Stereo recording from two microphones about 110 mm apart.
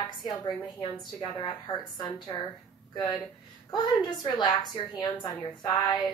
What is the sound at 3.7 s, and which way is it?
A woman's voice, 40° left (ahead or behind).